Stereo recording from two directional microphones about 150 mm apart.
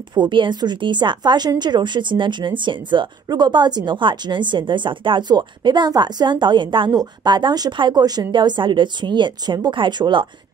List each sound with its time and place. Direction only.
0.1 s a woman's voice: 30° right (ahead or behind)